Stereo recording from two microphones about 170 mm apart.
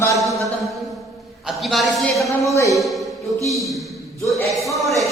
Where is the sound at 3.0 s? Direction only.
20° right (ahead or behind).